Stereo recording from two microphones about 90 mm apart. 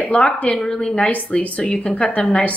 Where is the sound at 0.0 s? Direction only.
15° left (ahead or behind).